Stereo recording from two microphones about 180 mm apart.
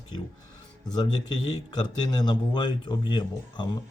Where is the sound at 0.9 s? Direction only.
25° left (ahead or behind).